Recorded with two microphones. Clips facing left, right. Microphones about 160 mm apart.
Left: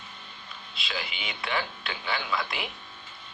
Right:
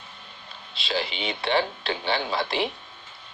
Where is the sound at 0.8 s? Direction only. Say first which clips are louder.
Right 8 dB; 30° right (ahead or behind).